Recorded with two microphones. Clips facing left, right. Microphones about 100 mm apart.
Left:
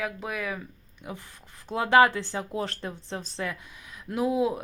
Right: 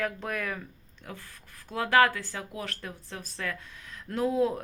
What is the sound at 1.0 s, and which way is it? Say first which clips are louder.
Speech: left 4 dB; 15° left (ahead or behind).